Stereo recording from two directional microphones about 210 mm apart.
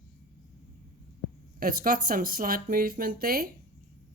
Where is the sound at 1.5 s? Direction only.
40° right (ahead or behind).